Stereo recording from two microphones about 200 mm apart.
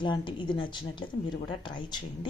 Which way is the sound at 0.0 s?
25° left (ahead or behind).